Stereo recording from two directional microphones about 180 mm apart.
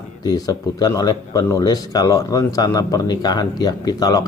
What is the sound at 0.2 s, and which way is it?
Speech, 20° left (ahead or behind).